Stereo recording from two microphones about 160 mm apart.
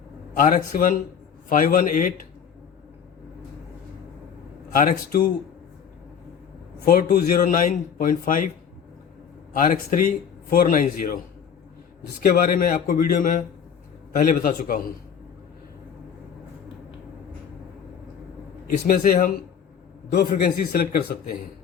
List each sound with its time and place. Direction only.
0.3 s a man's voice: 60° left (ahead or behind)
4.7 s a man's voice: 60° left (ahead or behind)
6.7 s a man's voice: 65° left (ahead or behind)
9.6 s a man's voice: 55° left (ahead or behind)
18.9 s a man's voice: 60° left (ahead or behind)